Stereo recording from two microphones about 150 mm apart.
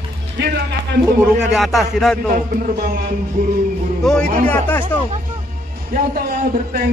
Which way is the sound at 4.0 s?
5° left (ahead or behind).